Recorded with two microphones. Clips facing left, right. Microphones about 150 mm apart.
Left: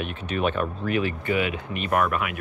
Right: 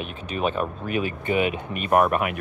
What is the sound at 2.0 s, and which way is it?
Speech, 35° right (ahead or behind).